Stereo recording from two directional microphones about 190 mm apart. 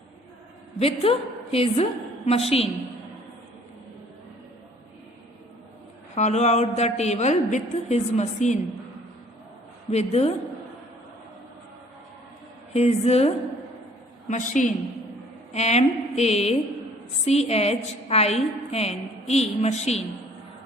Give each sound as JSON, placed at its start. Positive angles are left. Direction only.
{"t": 0.8, "sound": "a woman's voice", "side_deg": 30}
{"t": 6.1, "sound": "a woman's voice", "side_deg": 35}
{"t": 9.9, "sound": "a woman's voice", "side_deg": 35}
{"t": 12.7, "sound": "a woman's voice", "side_deg": 35}